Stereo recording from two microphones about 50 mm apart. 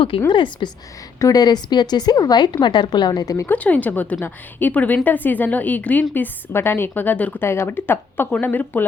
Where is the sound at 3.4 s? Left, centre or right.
Left.